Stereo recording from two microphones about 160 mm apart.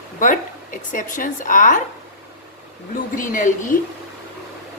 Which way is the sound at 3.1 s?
55° left (ahead or behind).